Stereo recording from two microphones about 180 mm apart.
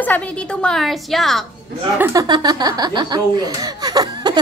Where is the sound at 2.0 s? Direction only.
20° right (ahead or behind).